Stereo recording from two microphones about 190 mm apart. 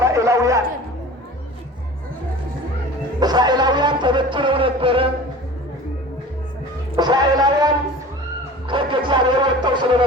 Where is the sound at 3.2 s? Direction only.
20° right (ahead or behind).